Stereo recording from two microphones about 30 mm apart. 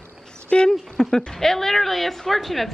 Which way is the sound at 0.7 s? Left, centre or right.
Centre.